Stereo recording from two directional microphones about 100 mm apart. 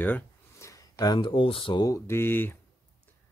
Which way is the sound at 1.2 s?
60° left (ahead or behind).